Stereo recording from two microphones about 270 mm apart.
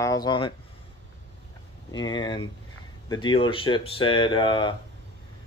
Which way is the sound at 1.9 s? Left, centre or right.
Centre.